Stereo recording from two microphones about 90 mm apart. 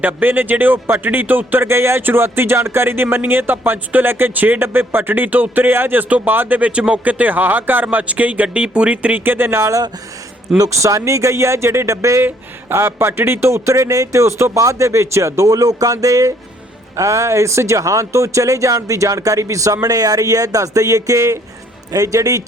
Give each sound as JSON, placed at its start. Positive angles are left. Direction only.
{"t": 0.0, "sound": "speech", "side_deg": -20}